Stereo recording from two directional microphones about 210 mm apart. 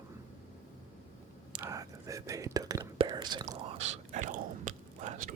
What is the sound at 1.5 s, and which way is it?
Whispering, 15° right (ahead or behind).